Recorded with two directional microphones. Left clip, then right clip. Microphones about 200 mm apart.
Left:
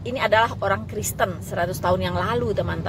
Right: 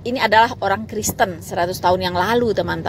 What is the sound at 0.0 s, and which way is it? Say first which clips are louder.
A woman's voice: right 5 dB; 30° right (ahead or behind).